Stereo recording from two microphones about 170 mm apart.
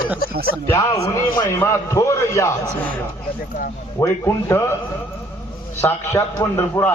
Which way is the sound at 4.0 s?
15° left (ahead or behind).